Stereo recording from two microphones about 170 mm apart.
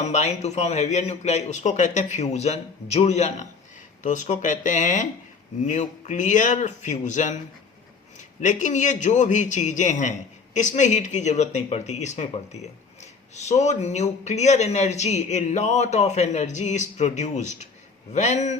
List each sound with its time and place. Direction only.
0.0 s a man's voice: 40° left (ahead or behind)
8.4 s a man's voice: 45° left (ahead or behind)